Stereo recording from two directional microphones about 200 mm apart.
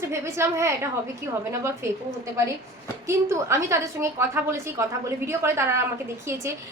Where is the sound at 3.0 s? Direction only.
15° right (ahead or behind).